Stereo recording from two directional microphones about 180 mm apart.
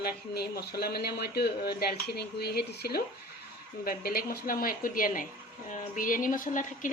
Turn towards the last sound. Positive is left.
turn(degrees=45)  # may be behind; listen again after turning